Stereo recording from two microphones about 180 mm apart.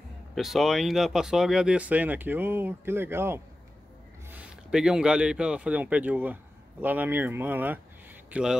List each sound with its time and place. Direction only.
0.3 s speech: centre (ahead or behind)